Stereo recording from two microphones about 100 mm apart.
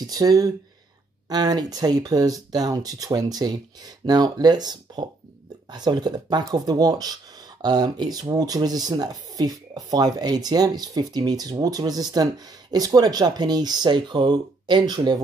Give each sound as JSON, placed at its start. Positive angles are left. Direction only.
{"t": 0.0, "sound": "speech", "side_deg": -40}